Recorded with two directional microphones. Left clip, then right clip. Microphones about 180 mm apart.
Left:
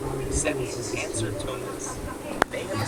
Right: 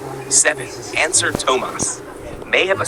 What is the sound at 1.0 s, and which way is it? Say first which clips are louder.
Speech: right 17 dB; 55° right (ahead or behind).